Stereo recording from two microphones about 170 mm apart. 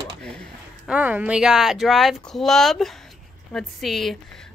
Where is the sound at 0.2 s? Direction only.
5° left (ahead or behind).